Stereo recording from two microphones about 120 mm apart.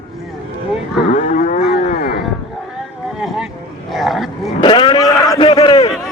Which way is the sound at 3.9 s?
Centre (ahead or behind).